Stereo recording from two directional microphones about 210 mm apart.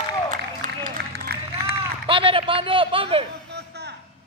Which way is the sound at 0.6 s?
40° right (ahead or behind).